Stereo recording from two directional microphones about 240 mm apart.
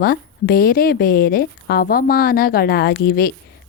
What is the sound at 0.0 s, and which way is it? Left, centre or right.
A woman's voice, left.